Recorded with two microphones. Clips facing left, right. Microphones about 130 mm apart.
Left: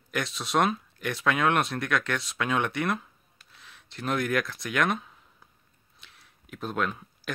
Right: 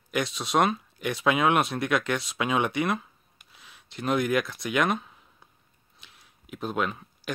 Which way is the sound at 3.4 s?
5° right (ahead or behind).